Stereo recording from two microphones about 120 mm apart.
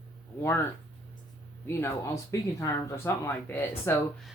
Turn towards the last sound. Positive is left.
turn(degrees=20)  # may be behind; listen again after turning